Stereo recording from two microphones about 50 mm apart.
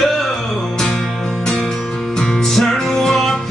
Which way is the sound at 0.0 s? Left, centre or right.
Centre.